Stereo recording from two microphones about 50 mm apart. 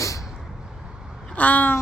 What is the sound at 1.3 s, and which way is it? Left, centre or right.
Cat, left.